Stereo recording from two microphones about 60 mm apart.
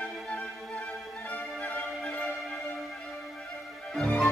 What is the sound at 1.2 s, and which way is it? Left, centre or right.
Music, left.